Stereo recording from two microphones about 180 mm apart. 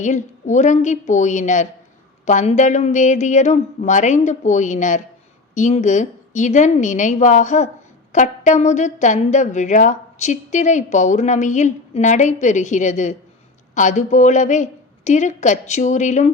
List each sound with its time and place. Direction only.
0.0 s a woman's voice: 40° left (ahead or behind)